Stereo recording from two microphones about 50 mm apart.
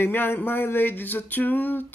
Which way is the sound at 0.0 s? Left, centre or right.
Left.